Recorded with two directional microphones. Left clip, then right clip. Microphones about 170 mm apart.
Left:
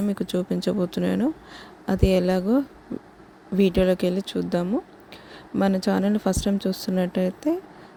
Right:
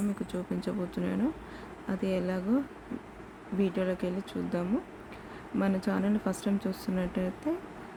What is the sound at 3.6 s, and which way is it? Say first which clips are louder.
Speech: left 10 dB; 50° left (ahead or behind).